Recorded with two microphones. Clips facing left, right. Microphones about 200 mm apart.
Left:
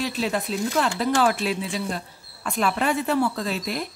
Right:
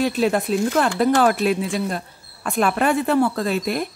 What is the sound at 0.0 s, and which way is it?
Speech, 50° right (ahead or behind).